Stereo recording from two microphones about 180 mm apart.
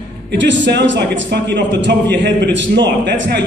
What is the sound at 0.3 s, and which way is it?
A man's voice, 90° right.